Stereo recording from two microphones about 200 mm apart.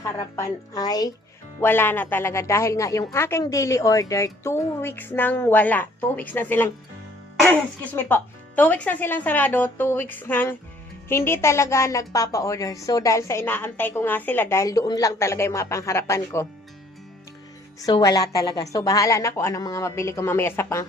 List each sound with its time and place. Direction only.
0.3 s a woman's voice: 15° left (ahead or behind)
7.9 s a woman's voice: 10° left (ahead or behind)
17.7 s a woman's voice: 20° left (ahead or behind)